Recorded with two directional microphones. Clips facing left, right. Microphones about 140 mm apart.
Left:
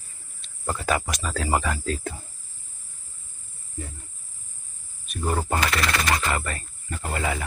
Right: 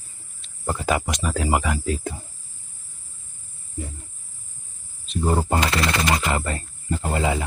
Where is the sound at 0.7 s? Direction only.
20° right (ahead or behind).